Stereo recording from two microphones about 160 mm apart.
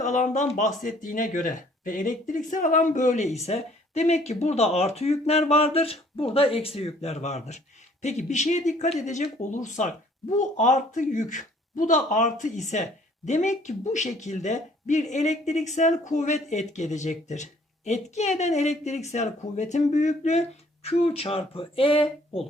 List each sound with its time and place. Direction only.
0.0 s speech: 50° left (ahead or behind); by 22.4 s 35° left (ahead or behind)